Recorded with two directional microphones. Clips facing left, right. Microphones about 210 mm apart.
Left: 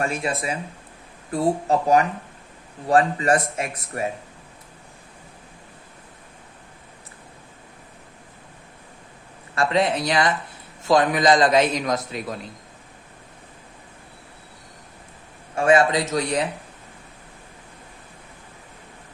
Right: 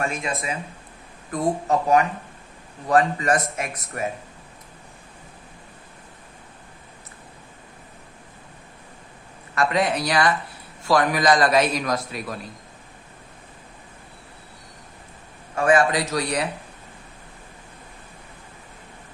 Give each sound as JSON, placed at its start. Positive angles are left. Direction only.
{"t": 0.0, "sound": "speech", "side_deg": 35}
{"t": 9.6, "sound": "a man's voice", "side_deg": 25}
{"t": 15.5, "sound": "a man's voice", "side_deg": 25}